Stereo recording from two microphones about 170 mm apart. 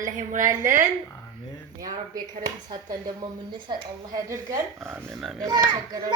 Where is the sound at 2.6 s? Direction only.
25° right (ahead or behind).